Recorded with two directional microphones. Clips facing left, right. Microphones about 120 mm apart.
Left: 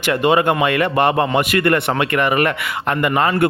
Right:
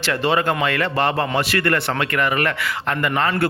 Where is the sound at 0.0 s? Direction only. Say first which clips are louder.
Left 4 dB; 15° left (ahead or behind).